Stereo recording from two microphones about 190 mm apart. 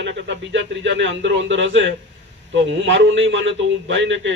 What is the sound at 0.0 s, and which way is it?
A man's voice, 70° right (ahead or behind).